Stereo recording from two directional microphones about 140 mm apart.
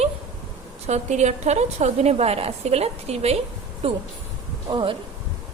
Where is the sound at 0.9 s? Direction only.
55° right (ahead or behind); by 4.9 s 35° right (ahead or behind).